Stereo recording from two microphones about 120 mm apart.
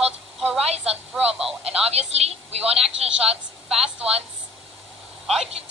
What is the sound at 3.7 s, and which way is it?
Speech, 5° right (ahead or behind).